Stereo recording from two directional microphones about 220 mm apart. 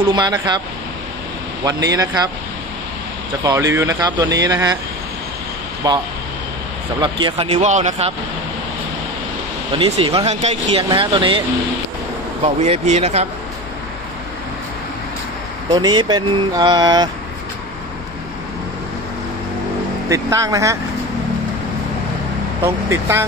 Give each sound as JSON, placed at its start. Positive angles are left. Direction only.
{"t": 0.1, "sound": "speech", "side_deg": -20}
{"t": 1.6, "sound": "speech", "side_deg": -15}
{"t": 3.4, "sound": "speech", "side_deg": -15}
{"t": 5.8, "sound": "speech", "side_deg": -20}
{"t": 9.7, "sound": "speech", "side_deg": -25}
{"t": 10.8, "sound": "speech", "side_deg": -20}
{"t": 15.7, "sound": "speech", "side_deg": -20}
{"t": 20.1, "sound": "speech", "side_deg": -15}
{"t": 22.6, "sound": "speech", "side_deg": -10}